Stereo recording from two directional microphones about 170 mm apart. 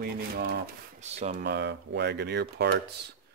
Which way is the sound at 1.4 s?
85° right.